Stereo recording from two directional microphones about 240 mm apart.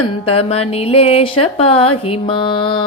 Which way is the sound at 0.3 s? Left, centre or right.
Left.